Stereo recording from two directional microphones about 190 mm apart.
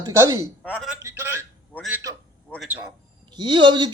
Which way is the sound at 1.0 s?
15° right (ahead or behind).